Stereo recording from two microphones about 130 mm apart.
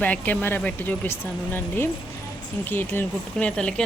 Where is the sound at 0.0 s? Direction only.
10° left (ahead or behind).